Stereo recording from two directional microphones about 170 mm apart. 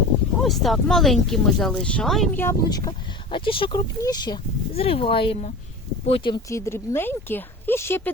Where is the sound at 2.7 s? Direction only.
25° left (ahead or behind).